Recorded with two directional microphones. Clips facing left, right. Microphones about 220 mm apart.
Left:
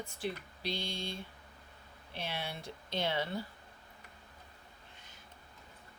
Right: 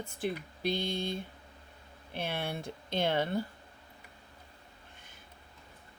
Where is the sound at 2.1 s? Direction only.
55° right (ahead or behind).